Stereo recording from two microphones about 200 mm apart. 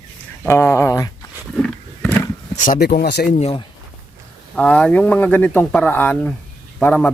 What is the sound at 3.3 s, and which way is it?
Speech, 30° left (ahead or behind).